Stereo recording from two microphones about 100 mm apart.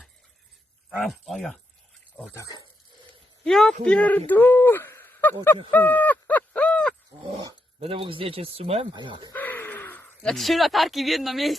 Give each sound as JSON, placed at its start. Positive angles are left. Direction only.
{"t": 0.9, "sound": "speech", "side_deg": 0}
{"t": 2.3, "sound": "speech", "side_deg": 30}
{"t": 3.4, "sound": "speech", "side_deg": 5}
{"t": 5.7, "sound": "owl", "side_deg": 15}
{"t": 7.8, "sound": "speech", "side_deg": -70}
{"t": 8.9, "sound": "speech", "side_deg": -50}
{"t": 9.3, "sound": "gasp", "side_deg": 15}
{"t": 10.2, "sound": "speech", "side_deg": 0}